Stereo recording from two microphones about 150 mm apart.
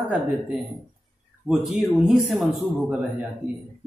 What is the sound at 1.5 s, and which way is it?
Speech, 5° right (ahead or behind).